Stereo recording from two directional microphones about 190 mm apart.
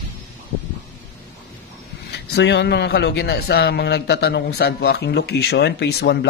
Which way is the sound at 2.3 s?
60° left (ahead or behind).